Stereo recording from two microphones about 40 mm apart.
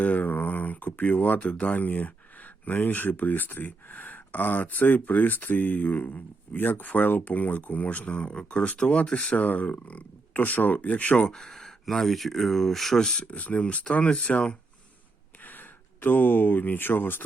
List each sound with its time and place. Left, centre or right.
0.0 s a sound: left
1.0 s speech: left
9.1 s speech: left
11.3 s speech: centre
13.0 s speech: centre
13.2 s speech: left
15.4 s speech: left